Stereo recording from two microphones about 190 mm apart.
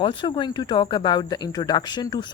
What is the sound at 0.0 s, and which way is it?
Speech, 25° left (ahead or behind).